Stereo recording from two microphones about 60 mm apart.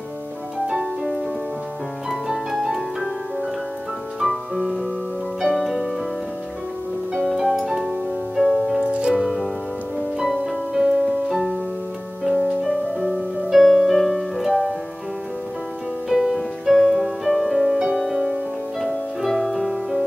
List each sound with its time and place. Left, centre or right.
0.7 s music: centre
4.2 s music: centre
7.2 s music: centre
8.7 s music: centre
9.1 s music: centre
16.1 s music: centre